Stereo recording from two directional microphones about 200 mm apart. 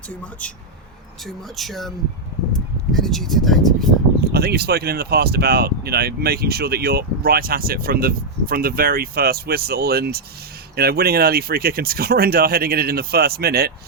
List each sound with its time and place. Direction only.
0.1 s speech: 5° left (ahead or behind)
2.9 s speech: centre (ahead or behind)
4.2 s speech: 50° right (ahead or behind)